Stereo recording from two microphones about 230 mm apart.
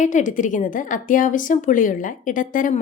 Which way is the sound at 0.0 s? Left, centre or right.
Left.